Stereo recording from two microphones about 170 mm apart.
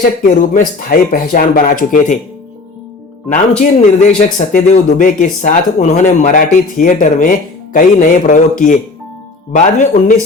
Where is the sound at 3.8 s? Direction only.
45° left (ahead or behind).